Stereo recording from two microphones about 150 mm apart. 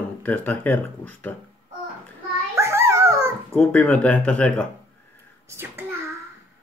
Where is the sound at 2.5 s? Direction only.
20° right (ahead or behind).